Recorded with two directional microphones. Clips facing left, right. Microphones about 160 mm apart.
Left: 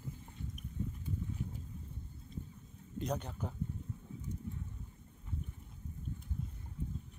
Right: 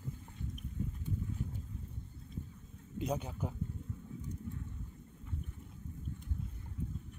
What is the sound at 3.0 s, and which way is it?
Speech, 5° right (ahead or behind).